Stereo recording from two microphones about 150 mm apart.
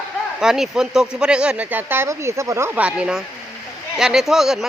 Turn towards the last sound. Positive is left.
turn(degrees=-5)  # may be behind; listen again after turning